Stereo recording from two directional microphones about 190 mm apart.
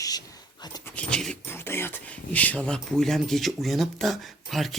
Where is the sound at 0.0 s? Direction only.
20° left (ahead or behind).